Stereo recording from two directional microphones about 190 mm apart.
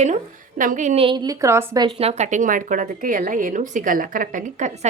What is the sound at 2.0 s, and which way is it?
A woman's voice, 35° right (ahead or behind).